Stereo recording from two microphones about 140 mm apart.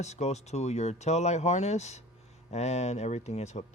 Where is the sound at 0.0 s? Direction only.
55° left (ahead or behind).